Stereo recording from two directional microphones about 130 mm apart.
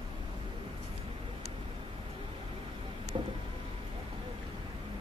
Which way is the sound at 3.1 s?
45° right (ahead or behind).